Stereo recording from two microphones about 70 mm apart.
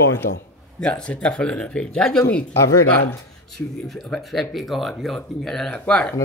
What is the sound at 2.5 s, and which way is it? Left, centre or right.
Speech, left.